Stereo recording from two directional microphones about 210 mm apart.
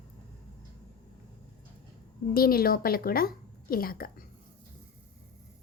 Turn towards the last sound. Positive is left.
turn(degrees=45)  # may be behind; listen again after turning